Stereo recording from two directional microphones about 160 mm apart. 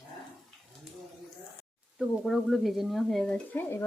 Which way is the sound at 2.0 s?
Centre (ahead or behind).